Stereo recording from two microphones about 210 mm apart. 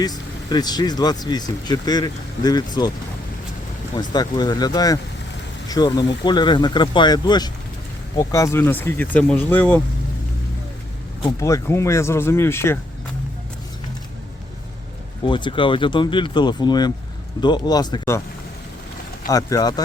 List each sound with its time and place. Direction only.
0.0 s speech: 20° left (ahead or behind)
3.9 s speech: 20° left (ahead or behind)
11.2 s speech: 15° left (ahead or behind)
15.3 s speech: 20° left (ahead or behind)
19.3 s speech: 15° left (ahead or behind)